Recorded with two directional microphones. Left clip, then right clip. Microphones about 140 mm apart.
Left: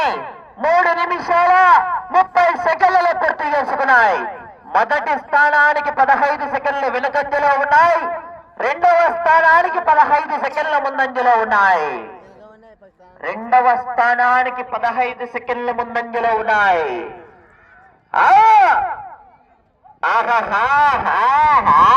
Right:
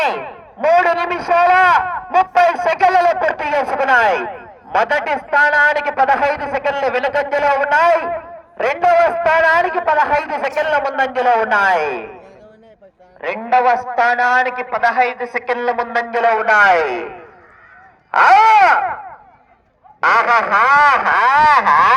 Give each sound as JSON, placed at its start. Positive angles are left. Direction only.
{"t": 0.0, "sound": "a man's voice", "side_deg": -40}
{"t": 13.2, "sound": "a man's voice", "side_deg": -50}
{"t": 20.0, "sound": "speech", "side_deg": -25}